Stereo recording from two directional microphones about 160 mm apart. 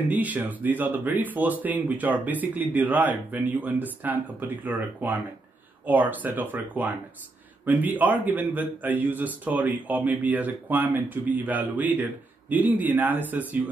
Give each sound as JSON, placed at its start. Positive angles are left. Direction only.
{"t": 0.1, "sound": "a man's voice", "side_deg": -10}